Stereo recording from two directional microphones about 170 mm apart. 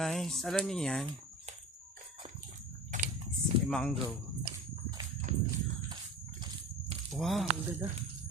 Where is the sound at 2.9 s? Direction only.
50° right (ahead or behind).